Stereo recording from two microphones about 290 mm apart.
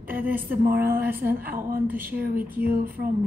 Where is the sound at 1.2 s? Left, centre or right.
Right.